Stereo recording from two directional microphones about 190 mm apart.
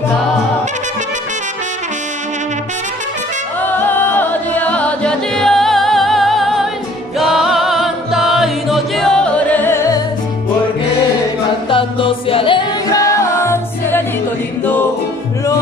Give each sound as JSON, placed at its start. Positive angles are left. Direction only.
{"t": 3.6, "sound": "music", "side_deg": 10}
{"t": 11.7, "sound": "music", "side_deg": 30}